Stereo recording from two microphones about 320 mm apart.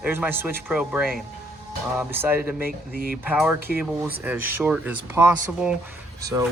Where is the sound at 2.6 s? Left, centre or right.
Right.